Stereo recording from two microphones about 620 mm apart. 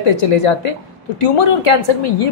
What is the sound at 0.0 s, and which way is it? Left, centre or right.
A woman's voice, left.